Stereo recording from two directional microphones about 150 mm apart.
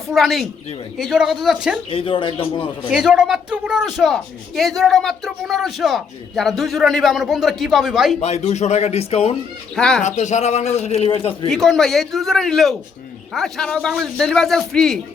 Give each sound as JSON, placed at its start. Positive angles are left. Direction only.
{"t": 0.1, "sound": "speech", "side_deg": 0}
{"t": 1.9, "sound": "a man's voice", "side_deg": 35}
{"t": 2.9, "sound": "speech", "side_deg": -5}
{"t": 8.2, "sound": "speech", "side_deg": 45}
{"t": 9.7, "sound": "speech", "side_deg": 5}
{"t": 10.0, "sound": "speech", "side_deg": 50}
{"t": 11.4, "sound": "speech", "side_deg": 0}